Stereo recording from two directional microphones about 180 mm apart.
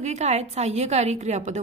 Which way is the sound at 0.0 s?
40° right (ahead or behind).